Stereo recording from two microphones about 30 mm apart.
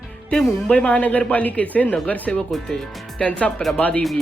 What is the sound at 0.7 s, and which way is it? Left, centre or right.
Speech, left.